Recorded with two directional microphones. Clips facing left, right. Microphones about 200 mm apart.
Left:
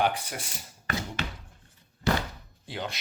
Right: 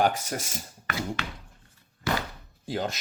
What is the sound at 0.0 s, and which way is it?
Speech, 45° right (ahead or behind).